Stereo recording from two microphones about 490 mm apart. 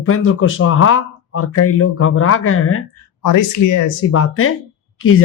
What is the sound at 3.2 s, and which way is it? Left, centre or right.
Speech, left.